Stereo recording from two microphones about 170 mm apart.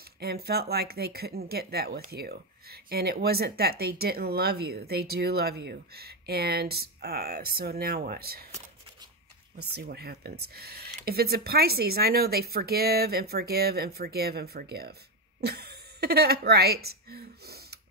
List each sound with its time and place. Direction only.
0.2 s speech: 65° right (ahead or behind)
9.8 s speech: 70° right (ahead or behind)